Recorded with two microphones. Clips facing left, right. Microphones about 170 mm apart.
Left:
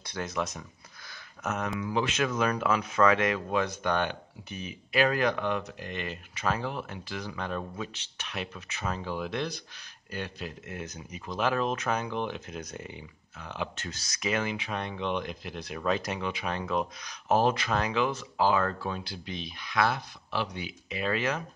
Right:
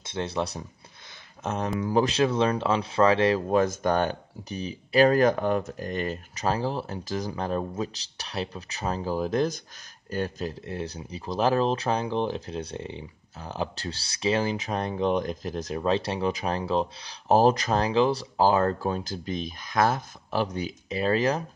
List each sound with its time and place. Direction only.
0.0 s speech: 25° right (ahead or behind)